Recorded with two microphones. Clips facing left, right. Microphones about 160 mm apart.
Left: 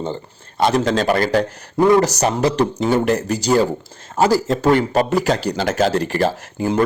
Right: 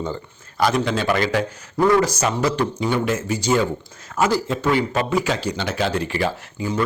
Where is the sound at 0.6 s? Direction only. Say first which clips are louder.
Left 2 dB; 25° left (ahead or behind).